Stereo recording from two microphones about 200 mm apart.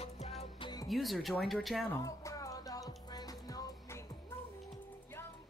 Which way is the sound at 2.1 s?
15° left (ahead or behind).